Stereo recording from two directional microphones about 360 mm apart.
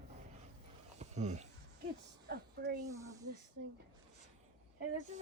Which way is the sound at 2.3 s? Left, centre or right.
Right.